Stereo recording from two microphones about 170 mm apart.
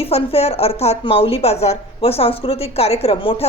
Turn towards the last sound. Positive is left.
turn(degrees=35)  # may be behind; listen again after turning